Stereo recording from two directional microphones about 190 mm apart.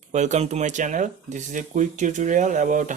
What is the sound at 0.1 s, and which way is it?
Speech, 40° right (ahead or behind).